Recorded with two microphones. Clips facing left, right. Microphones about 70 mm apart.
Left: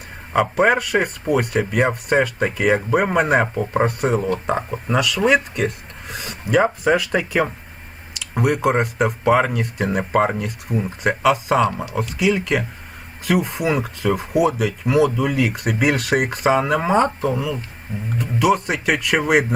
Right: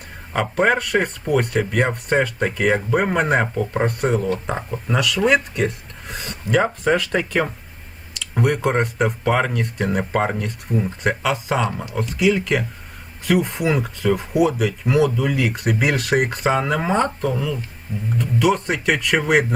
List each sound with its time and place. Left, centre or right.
0.3 s speech: centre